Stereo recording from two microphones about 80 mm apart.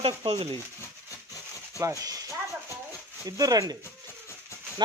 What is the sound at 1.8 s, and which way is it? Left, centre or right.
Speech, right.